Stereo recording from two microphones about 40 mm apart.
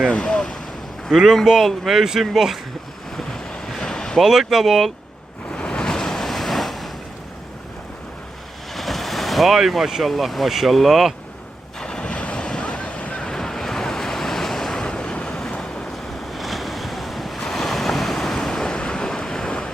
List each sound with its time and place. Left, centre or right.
0.1 s ocean: left
1.1 s speech: centre
3.7 s boat: centre
4.2 s speech: centre
5.5 s waves: left; by 6.9 s centre
8.7 s vehicle: centre
10.1 s speech: centre
11.8 s a sound: centre
12.0 s waves: left
13.2 s waves: centre
14.8 s waves: left
16.3 s waves: centre; by 19.7 s left